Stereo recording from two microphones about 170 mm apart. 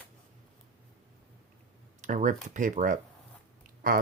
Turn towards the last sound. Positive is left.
turn(degrees=-55)  # may be behind; listen again after turning